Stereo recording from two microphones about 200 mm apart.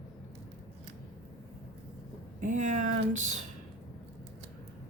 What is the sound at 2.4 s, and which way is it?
Speech, 40° right (ahead or behind).